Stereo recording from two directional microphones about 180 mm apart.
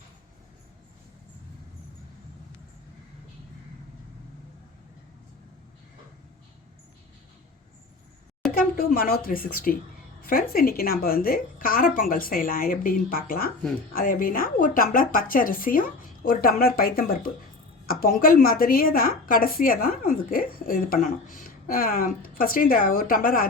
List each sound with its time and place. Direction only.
8.8 s a woman's voice: 55° left (ahead or behind)